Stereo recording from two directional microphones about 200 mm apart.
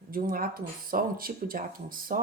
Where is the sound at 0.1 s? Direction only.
45° right (ahead or behind).